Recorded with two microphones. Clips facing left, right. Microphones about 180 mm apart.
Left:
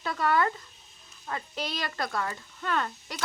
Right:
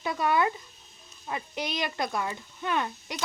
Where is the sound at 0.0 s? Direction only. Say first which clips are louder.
Right 1 dB; 15° right (ahead or behind).